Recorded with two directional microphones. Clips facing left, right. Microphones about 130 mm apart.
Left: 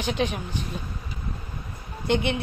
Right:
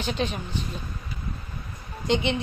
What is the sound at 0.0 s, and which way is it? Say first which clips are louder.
Speech: left 2 dB; 15° left (ahead or behind).